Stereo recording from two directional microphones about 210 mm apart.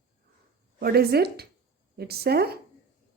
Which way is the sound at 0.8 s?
50° right (ahead or behind).